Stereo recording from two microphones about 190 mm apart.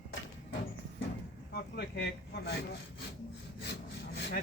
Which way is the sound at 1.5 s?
60° left (ahead or behind).